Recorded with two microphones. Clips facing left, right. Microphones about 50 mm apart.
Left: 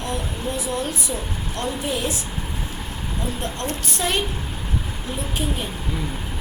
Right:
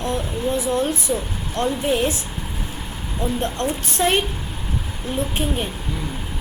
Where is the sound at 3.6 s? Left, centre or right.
Right.